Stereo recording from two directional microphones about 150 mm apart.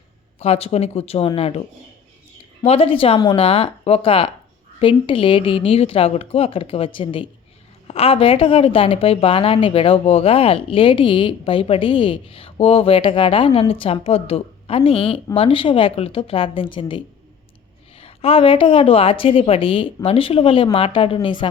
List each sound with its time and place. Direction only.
0.3 s a woman's voice: 40° left (ahead or behind)
2.6 s a woman's voice: 40° left (ahead or behind)